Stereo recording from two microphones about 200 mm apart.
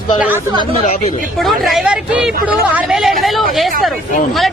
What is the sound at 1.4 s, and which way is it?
Speech, centre (ahead or behind).